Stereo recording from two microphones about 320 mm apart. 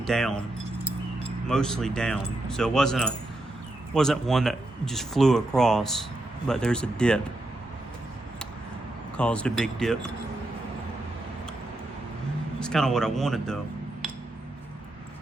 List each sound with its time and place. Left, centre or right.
0.0 s speech: centre
9.1 s speech: centre
12.5 s speech: centre